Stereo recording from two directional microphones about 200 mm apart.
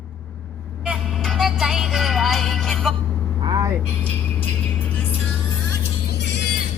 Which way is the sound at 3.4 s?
20° right (ahead or behind).